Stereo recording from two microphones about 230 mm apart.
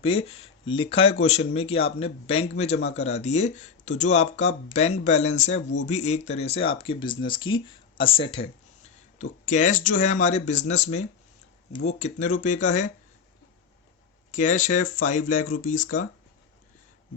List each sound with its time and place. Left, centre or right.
0.0 s speech: left
14.3 s speech: left